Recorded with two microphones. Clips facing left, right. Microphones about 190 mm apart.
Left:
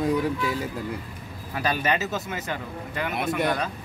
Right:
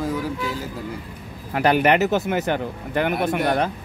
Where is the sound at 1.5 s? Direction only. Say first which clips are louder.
Right 8 dB; 65° right (ahead or behind).